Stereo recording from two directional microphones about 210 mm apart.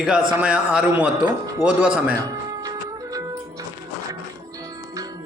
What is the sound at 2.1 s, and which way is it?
Music, 15° right (ahead or behind).